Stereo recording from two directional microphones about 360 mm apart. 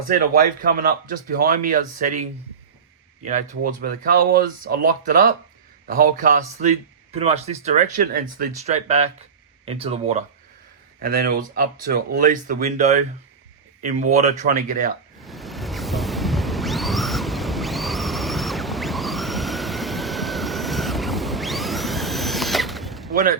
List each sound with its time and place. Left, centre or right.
0.1 s speech: right
3.2 s speech: right
15.2 s music: centre